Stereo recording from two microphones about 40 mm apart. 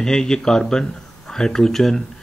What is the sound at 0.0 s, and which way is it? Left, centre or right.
Speech, centre.